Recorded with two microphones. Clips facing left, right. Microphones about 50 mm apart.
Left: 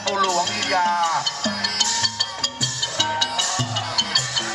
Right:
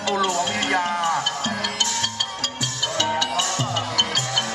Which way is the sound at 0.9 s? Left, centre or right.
Right.